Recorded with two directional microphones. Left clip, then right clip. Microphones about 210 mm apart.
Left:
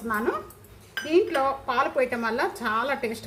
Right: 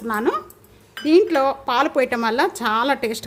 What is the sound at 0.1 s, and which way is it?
A woman's voice, 50° right (ahead or behind).